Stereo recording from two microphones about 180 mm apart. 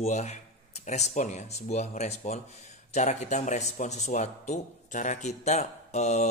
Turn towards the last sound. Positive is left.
turn(degrees=40)  # may be behind; listen again after turning